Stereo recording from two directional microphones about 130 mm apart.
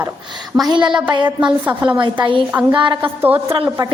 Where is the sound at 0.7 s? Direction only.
35° right (ahead or behind).